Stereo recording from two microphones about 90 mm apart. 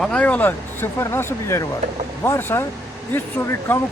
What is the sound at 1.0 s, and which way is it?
Speech, 30° left (ahead or behind).